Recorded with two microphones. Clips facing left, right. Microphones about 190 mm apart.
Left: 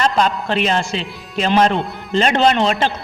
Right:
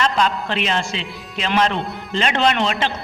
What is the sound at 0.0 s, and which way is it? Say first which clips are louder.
A man's voice: left 2 dB; 40° left (ahead or behind).